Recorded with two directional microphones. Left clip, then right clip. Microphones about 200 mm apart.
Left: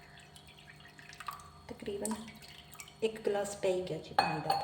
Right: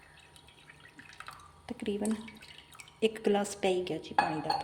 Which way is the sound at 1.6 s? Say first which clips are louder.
Right 6 dB; 40° right (ahead or behind).